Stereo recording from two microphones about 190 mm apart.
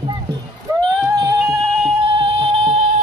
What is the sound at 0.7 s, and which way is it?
Music, 20° right (ahead or behind).